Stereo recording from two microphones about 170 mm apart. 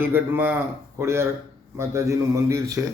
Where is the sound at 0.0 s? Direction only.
10° right (ahead or behind).